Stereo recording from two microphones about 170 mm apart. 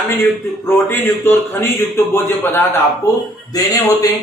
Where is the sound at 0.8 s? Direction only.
15° left (ahead or behind).